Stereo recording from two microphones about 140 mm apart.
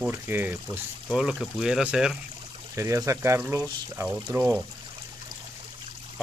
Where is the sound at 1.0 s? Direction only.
5° right (ahead or behind).